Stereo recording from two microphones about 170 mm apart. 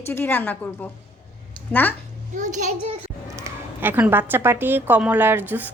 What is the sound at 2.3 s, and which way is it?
Speech, 45° right (ahead or behind).